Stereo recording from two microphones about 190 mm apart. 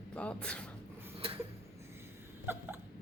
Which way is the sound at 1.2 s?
30° right (ahead or behind).